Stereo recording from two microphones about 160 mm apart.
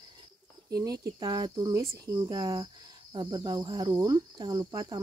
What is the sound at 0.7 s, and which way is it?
Speech, 25° right (ahead or behind).